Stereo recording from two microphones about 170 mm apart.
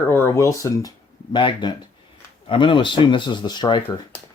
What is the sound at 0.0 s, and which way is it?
Speech, 10° left (ahead or behind).